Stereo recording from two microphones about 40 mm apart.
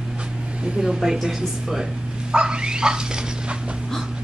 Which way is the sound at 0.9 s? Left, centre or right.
Centre.